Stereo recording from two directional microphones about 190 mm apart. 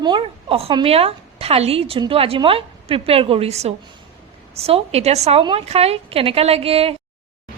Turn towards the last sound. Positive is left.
turn(degrees=-30)  # may be behind; listen again after turning